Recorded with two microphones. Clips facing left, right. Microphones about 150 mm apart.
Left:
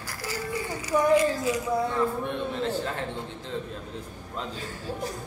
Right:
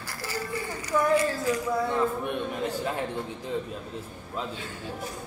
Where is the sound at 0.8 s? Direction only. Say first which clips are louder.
Left 2 dB; 15° left (ahead or behind).